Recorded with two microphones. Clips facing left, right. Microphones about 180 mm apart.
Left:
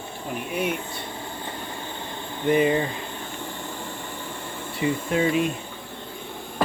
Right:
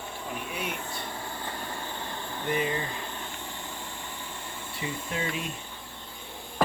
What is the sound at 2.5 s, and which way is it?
Speech, 65° left (ahead or behind).